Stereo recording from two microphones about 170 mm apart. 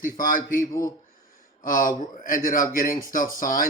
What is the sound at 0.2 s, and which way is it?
Speech, 55° left (ahead or behind).